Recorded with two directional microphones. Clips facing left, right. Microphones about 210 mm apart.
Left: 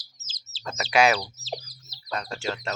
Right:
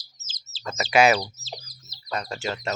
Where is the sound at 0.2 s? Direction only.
35° left (ahead or behind).